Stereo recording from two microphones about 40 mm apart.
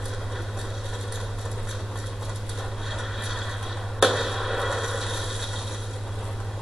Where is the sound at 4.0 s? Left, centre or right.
Centre.